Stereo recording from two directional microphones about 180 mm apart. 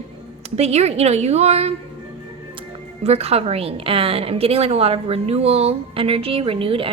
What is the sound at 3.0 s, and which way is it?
A woman's voice, 35° right (ahead or behind).